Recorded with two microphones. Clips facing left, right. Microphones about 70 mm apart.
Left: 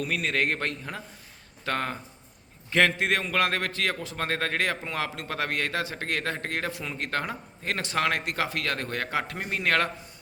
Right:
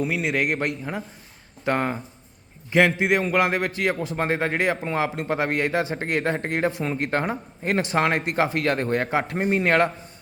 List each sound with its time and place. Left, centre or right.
0.0 s a man's voice: centre